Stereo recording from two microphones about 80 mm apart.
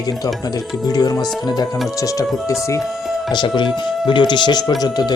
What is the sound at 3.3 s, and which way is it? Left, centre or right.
Speech, left.